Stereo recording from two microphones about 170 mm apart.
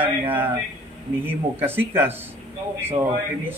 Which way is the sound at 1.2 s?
10° right (ahead or behind).